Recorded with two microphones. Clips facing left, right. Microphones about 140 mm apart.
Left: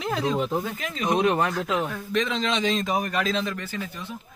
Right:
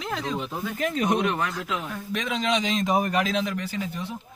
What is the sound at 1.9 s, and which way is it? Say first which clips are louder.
A man's voice: left 3 dB; 10° right (ahead or behind).